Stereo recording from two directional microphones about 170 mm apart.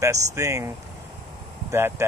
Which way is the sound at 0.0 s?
20° right (ahead or behind).